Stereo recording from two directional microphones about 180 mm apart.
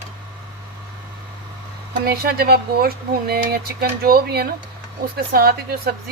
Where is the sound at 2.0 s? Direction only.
55° right (ahead or behind).